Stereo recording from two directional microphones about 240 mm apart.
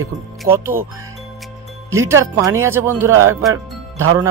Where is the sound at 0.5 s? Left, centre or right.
Centre.